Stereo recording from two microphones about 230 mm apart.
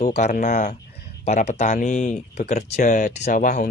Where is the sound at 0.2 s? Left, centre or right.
Left.